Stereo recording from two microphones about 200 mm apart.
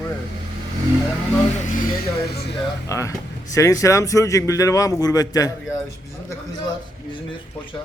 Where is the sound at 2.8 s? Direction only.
15° left (ahead or behind).